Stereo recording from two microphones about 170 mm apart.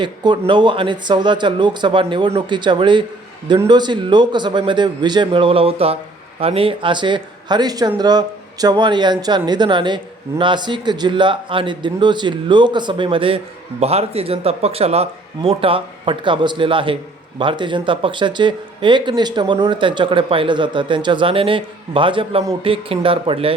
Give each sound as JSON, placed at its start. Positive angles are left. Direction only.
{"t": 0.0, "sound": "speech", "side_deg": -25}